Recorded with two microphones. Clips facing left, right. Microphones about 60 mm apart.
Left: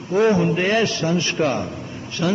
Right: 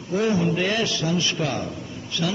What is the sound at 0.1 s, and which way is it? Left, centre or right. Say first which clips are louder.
A man's voice: left 5 dB; left.